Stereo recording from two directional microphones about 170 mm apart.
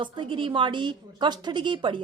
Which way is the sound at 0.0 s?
30° right (ahead or behind).